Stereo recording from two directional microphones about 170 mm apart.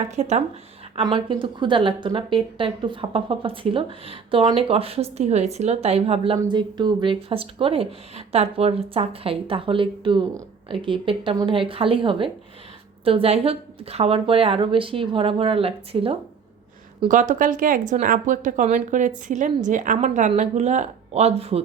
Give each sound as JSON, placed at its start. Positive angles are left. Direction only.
{"t": 0.2, "sound": "speech", "side_deg": -40}
{"t": 0.9, "sound": "speech", "side_deg": -30}
{"t": 6.3, "sound": "speech", "side_deg": -25}
{"t": 17.1, "sound": "a woman's voice", "side_deg": -50}